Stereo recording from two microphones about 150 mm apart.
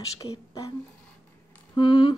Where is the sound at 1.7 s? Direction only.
30° left (ahead or behind).